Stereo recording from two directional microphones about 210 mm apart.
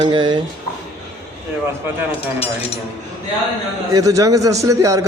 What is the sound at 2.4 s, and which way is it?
Speech, 25° left (ahead or behind).